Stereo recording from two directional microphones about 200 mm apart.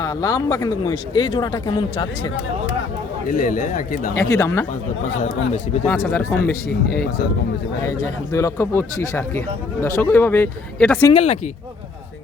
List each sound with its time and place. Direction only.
0.0 s speech: 20° left (ahead or behind)
3.2 s a man's voice: 45° left (ahead or behind)
4.1 s speech: 15° left (ahead or behind)
5.8 s speech: 10° left (ahead or behind)
7.9 s speech: 15° left (ahead or behind)
11.1 s speech: 30° left (ahead or behind)